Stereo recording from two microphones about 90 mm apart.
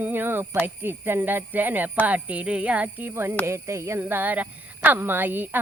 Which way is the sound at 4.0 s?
20° right (ahead or behind).